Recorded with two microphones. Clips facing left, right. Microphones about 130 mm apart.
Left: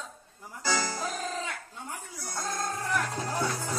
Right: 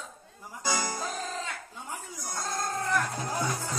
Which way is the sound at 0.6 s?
15° right (ahead or behind).